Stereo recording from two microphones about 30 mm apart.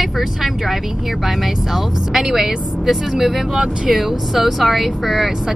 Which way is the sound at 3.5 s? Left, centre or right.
Right.